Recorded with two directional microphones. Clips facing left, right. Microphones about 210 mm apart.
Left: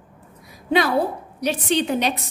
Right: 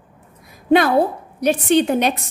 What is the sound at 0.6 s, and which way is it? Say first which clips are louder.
A woman's voice: right 5 dB; 50° right (ahead or behind).